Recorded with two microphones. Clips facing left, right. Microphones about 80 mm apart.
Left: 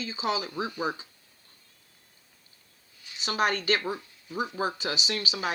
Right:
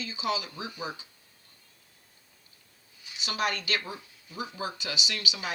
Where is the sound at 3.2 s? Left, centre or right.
Left.